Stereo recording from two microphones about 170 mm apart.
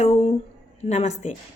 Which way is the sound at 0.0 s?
40° left (ahead or behind).